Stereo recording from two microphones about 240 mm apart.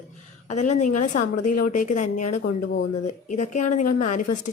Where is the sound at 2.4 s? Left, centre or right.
Left.